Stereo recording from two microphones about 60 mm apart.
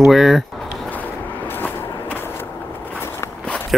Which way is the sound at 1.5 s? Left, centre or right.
Left.